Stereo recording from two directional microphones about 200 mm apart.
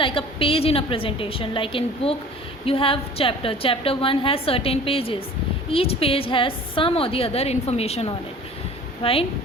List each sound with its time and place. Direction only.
0.0 s a woman's voice: 25° left (ahead or behind)